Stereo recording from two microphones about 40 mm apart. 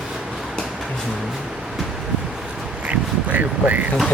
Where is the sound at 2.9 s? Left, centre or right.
Right.